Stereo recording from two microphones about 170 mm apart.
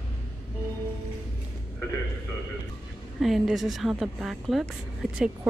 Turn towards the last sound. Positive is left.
turn(degrees=0)  # may be behind; listen again after turning